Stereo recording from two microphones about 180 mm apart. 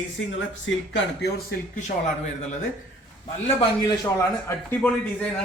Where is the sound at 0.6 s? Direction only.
75° left (ahead or behind).